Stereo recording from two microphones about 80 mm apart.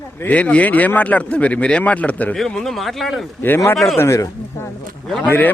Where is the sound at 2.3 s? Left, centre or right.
Centre.